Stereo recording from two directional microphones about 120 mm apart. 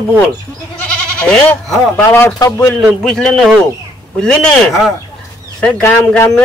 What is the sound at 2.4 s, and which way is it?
Speech, 30° left (ahead or behind).